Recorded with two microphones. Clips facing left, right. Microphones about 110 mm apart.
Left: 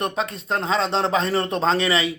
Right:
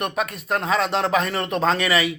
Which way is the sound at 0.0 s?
25° left (ahead or behind).